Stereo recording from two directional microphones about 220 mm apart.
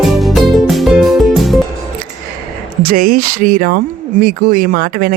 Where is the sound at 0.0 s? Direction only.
Centre (ahead or behind).